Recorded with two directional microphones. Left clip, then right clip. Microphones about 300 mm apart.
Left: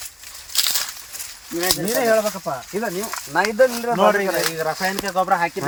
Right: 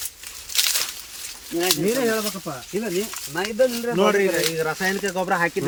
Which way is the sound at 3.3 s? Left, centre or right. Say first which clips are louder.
Left 5 dB; centre.